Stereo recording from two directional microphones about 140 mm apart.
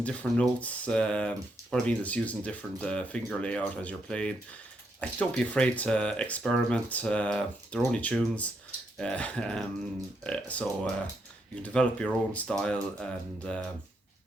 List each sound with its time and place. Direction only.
0.0 s speech: 10° left (ahead or behind)